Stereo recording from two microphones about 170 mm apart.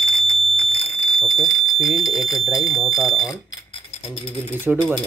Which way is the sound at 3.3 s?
20° left (ahead or behind).